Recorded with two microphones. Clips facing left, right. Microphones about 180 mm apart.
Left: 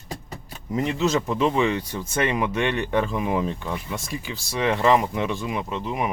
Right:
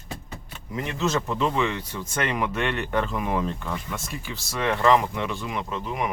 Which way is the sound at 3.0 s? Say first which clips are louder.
Left 2 dB; 15° left (ahead or behind).